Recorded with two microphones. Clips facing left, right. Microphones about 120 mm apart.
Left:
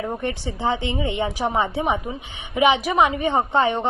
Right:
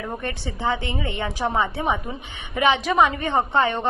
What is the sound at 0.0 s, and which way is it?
A woman's voice, 20° left (ahead or behind).